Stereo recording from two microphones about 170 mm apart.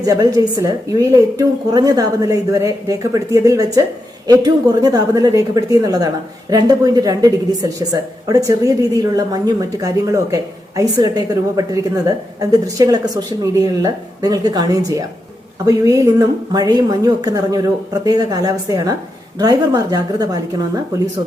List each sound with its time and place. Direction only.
0.0 s a woman's voice: 20° right (ahead or behind)